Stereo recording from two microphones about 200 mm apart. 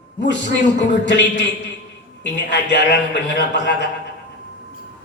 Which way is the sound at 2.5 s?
60° left (ahead or behind).